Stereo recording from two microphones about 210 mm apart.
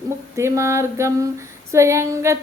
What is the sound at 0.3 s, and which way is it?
Female singing, 15° right (ahead or behind).